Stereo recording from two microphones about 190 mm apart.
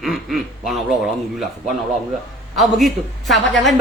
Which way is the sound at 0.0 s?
Centre (ahead or behind).